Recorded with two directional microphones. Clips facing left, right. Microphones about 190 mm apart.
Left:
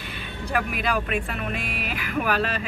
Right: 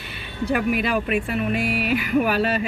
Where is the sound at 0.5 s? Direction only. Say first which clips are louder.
Right 4 dB; 5° right (ahead or behind).